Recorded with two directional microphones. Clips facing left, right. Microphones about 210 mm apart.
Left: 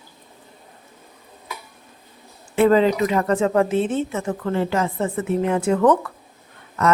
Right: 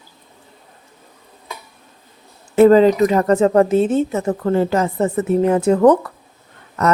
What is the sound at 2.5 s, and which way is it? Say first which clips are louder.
Speech: right 6 dB; 40° right (ahead or behind).